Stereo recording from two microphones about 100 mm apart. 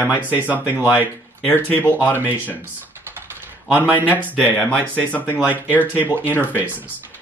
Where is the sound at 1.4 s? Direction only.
20° left (ahead or behind).